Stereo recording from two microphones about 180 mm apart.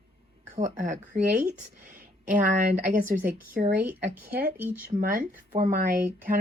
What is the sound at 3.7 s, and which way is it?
Speech, 10° right (ahead or behind).